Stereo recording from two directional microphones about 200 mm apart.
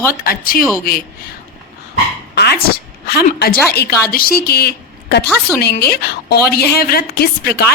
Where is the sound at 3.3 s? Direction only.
50° left (ahead or behind).